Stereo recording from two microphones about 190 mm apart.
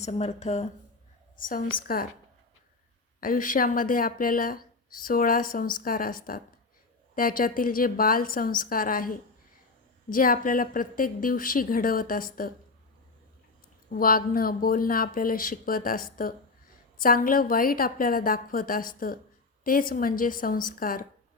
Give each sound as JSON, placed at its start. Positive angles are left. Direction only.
{"t": 0.0, "sound": "speech", "side_deg": 35}
{"t": 1.4, "sound": "speech", "side_deg": 45}
{"t": 3.2, "sound": "speech", "side_deg": 45}
{"t": 13.9, "sound": "speech", "side_deg": 50}